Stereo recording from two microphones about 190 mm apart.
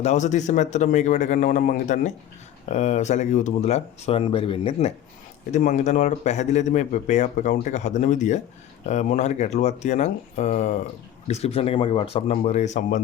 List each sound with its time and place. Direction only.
0.0 s speech: 40° left (ahead or behind)